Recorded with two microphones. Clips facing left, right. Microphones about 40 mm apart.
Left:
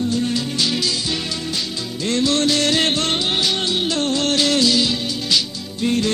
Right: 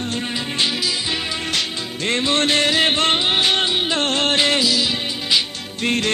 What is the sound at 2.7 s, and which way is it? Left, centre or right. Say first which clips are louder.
Music: right 1 dB; centre.